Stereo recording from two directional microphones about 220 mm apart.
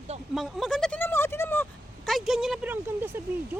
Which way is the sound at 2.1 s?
Centre (ahead or behind).